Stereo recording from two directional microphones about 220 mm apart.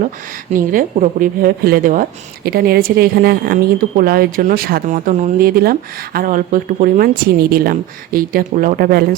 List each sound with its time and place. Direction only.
0.5 s speech: 40° right (ahead or behind)